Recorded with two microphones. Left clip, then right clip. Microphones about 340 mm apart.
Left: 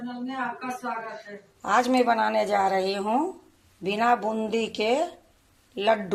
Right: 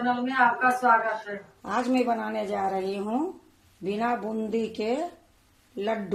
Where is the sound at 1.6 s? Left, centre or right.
Left.